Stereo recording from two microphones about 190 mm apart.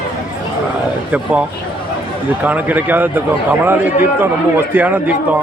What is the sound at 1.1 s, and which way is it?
Speech, 5° right (ahead or behind).